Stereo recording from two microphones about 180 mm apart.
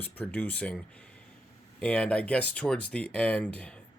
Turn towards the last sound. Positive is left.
turn(degrees=5)  # may be behind; listen again after turning